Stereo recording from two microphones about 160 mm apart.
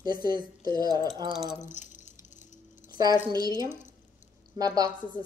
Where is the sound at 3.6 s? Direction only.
15° right (ahead or behind).